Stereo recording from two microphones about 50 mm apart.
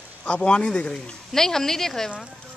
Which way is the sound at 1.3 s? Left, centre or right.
Centre.